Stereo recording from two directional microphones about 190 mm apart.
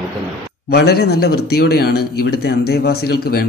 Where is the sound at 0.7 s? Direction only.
55° left (ahead or behind).